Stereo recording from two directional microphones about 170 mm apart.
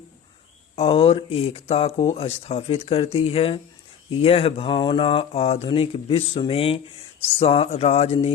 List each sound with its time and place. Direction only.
0.8 s speech: 35° left (ahead or behind)